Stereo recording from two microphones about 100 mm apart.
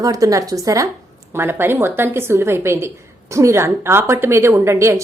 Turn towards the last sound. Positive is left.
turn(degrees=-30)  # may be behind; listen again after turning